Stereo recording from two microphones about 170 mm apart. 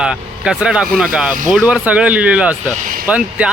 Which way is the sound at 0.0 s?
5° right (ahead or behind).